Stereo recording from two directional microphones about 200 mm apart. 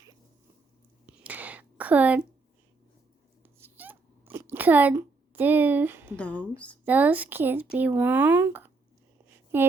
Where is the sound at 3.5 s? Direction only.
10° right (ahead or behind).